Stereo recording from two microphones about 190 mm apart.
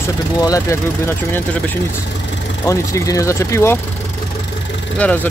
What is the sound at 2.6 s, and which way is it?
Speech, 15° left (ahead or behind).